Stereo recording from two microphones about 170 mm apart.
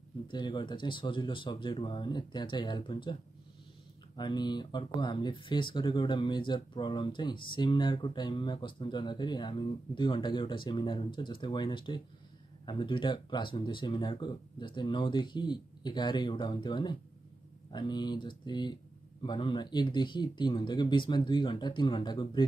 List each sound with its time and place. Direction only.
0.3 s speech: 25° left (ahead or behind)
4.2 s speech: 25° left (ahead or behind)